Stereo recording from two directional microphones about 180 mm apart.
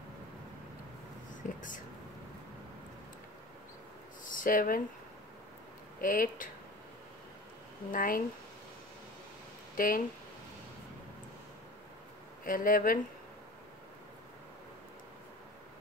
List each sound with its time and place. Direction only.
1.3 s speech: 45° left (ahead or behind)
4.2 s a sound: 50° left (ahead or behind)
5.9 s speech: 50° left (ahead or behind)
7.9 s speech: 50° left (ahead or behind)
9.8 s speech: 50° left (ahead or behind)
12.4 s speech: 50° left (ahead or behind)